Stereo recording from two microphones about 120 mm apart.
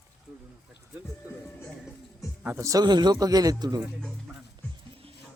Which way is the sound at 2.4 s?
20° right (ahead or behind).